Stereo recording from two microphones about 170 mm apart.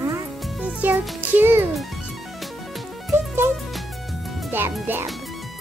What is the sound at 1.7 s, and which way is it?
Music, centre (ahead or behind).